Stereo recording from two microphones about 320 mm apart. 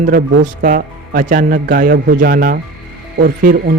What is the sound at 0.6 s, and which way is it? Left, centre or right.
Speech, right.